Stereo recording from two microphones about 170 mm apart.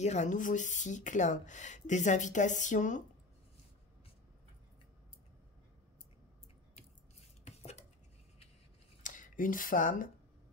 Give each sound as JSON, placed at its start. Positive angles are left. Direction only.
{"t": 0.0, "sound": "speech", "side_deg": 45}
{"t": 7.4, "sound": "dishes", "side_deg": 40}
{"t": 9.0, "sound": "speech", "side_deg": 50}